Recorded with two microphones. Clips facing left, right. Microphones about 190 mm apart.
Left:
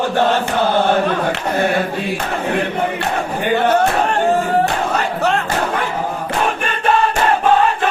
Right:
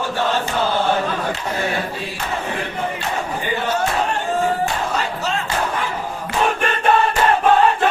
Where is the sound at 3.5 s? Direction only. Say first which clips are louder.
Left 7 dB; 60° left (ahead or behind).